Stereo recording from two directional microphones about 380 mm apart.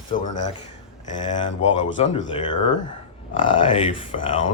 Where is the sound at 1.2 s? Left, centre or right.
Centre.